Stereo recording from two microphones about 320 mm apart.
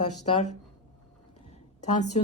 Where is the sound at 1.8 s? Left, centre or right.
Left.